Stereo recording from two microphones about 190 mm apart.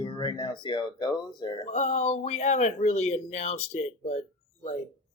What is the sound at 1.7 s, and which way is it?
Speech, 35° left (ahead or behind).